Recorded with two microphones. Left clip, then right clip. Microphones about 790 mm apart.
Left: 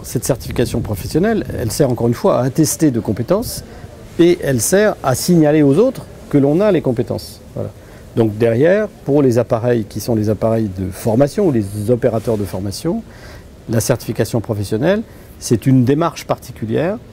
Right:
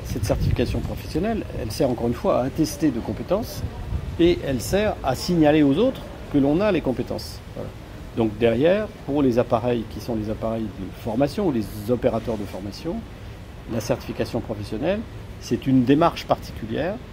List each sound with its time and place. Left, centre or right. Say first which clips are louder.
0.2 s speech: left 6 dB; left